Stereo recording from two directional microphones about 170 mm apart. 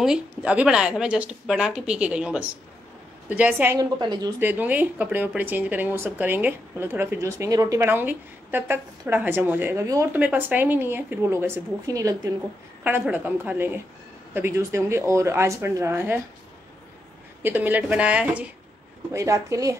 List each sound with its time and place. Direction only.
0.0 s speech: 5° right (ahead or behind)
4.0 s speech: 25° right (ahead or behind)
4.4 s speech: 10° right (ahead or behind)
17.4 s speech: 10° right (ahead or behind)
19.1 s speech: 20° right (ahead or behind)